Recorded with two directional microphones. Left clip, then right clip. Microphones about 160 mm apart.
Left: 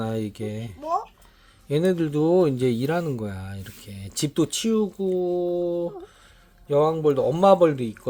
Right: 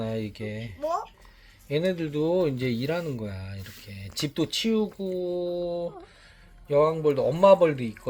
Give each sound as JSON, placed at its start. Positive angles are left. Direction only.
{"t": 0.0, "sound": "speech", "side_deg": 40}